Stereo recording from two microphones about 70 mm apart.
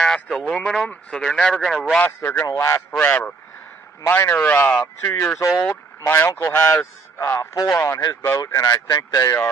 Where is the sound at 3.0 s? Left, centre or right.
Centre.